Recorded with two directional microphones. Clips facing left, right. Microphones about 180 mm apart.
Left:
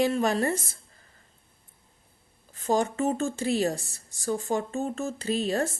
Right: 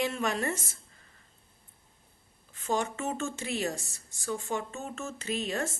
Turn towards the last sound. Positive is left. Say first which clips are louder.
# left 6 dB
turn(degrees=35)  # may be behind; listen again after turning